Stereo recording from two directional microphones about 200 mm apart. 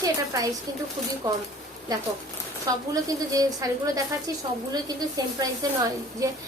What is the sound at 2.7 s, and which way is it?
A woman's voice, 20° right (ahead or behind).